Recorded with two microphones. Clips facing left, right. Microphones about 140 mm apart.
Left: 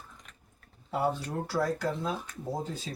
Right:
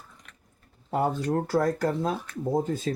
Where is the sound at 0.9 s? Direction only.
45° right (ahead or behind).